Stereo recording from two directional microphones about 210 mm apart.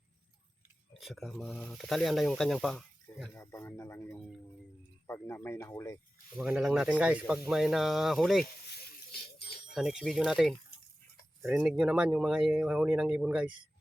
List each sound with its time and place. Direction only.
0.9 s speech: centre (ahead or behind)
3.4 s speech: 15° left (ahead or behind)
6.3 s speech: 5° right (ahead or behind)
9.1 s a sound: 50° left (ahead or behind)
9.7 s speech: centre (ahead or behind)